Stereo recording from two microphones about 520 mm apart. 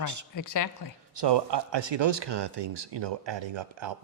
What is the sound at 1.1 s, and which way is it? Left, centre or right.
Speech, right.